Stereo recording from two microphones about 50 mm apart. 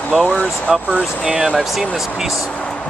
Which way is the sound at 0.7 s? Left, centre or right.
Centre.